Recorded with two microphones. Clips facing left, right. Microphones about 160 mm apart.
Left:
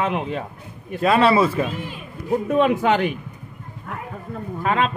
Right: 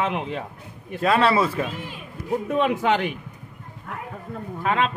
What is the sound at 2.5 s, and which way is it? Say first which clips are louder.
Speech: left 3 dB; 45° left (ahead or behind).